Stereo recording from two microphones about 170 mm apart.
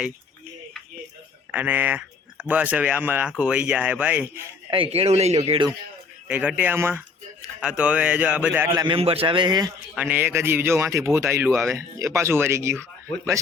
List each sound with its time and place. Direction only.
1.5 s speech: 10° right (ahead or behind)
4.7 s speech: 35° right (ahead or behind)
6.2 s speech: 10° right (ahead or behind)
8.7 s a man's voice: 20° right (ahead or behind)
9.0 s speech: 35° right (ahead or behind)
9.9 s speech: 10° right (ahead or behind)